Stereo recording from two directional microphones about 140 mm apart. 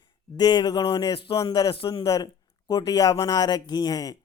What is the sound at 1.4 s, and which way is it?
Speech, 25° left (ahead or behind).